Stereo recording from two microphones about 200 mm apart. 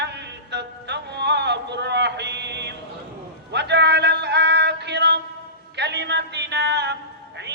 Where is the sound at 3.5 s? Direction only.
60° right (ahead or behind).